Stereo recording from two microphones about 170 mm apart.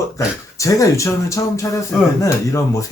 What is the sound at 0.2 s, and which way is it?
Speech, 20° left (ahead or behind).